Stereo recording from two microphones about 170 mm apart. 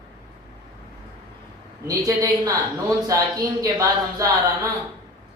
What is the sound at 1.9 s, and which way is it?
Speech, 20° right (ahead or behind).